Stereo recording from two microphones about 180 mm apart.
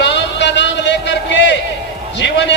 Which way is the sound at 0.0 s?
75° left (ahead or behind).